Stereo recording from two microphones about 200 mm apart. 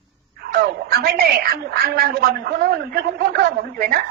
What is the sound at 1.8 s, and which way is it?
A woman's voice, 50° right (ahead or behind).